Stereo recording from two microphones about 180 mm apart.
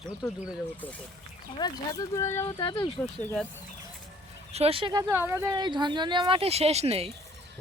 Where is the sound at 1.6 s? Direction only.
20° left (ahead or behind).